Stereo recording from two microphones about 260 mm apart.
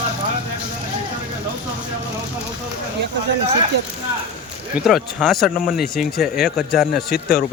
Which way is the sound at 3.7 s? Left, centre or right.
Right.